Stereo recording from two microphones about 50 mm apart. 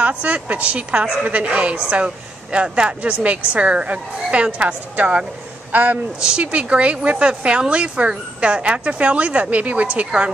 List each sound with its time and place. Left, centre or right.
0.0 s a man's voice: right
6.1 s speech: right